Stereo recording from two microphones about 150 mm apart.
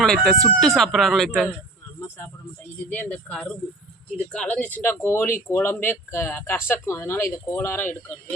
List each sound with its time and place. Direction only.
0.0 s speech: 5° left (ahead or behind)
2.0 s speech: 15° left (ahead or behind)